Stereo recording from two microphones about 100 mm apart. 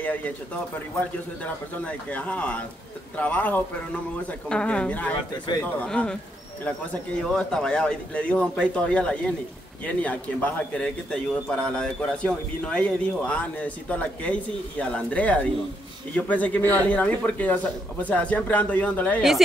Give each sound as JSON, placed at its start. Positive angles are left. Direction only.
{"t": 0.0, "sound": "a man's voice", "side_deg": 15}